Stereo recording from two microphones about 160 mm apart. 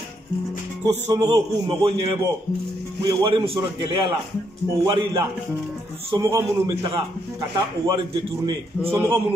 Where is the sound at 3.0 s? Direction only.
35° right (ahead or behind).